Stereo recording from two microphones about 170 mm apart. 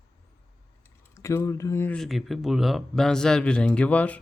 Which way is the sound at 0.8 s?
15° left (ahead or behind).